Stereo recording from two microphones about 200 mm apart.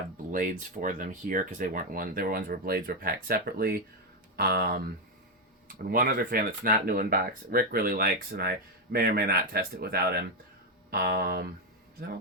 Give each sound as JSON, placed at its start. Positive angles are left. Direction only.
{"t": 0.3, "sound": "speech", "side_deg": -40}